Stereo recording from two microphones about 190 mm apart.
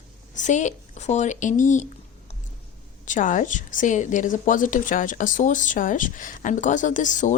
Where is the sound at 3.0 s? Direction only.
45° left (ahead or behind).